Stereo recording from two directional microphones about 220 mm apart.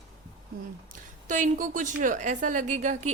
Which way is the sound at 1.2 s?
35° right (ahead or behind).